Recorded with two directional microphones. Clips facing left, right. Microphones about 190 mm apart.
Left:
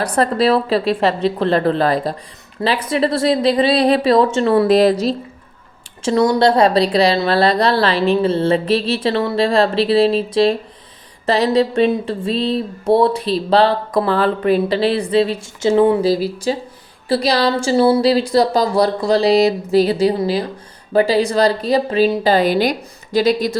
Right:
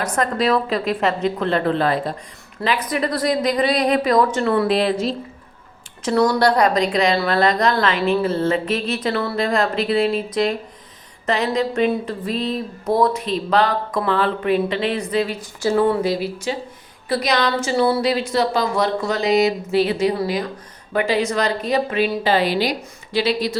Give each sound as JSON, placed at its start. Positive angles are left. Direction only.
{"t": 0.0, "sound": "a woman's voice", "side_deg": 35}
{"t": 4.7, "sound": "speech", "side_deg": 40}
{"t": 6.0, "sound": "speech", "side_deg": 20}
{"t": 16.0, "sound": "speech", "side_deg": 35}